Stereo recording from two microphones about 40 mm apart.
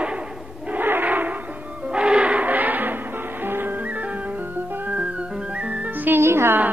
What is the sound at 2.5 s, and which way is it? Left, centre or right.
Music, right.